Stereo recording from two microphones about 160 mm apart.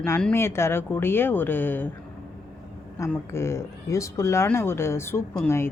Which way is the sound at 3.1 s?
15° left (ahead or behind).